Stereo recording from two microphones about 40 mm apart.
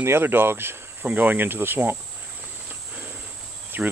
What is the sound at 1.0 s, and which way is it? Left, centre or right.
Cricket, right.